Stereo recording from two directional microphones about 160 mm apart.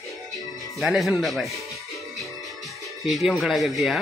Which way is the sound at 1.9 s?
Centre (ahead or behind).